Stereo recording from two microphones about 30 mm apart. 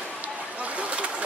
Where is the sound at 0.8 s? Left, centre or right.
Right.